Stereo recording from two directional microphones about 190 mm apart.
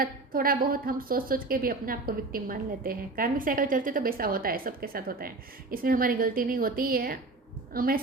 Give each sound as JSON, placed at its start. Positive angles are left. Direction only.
{"t": 0.0, "sound": "a woman's voice", "side_deg": -50}